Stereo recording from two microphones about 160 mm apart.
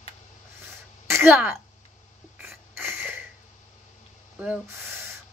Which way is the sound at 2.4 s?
10° right (ahead or behind).